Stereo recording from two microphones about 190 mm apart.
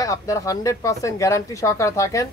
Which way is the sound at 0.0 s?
15° left (ahead or behind).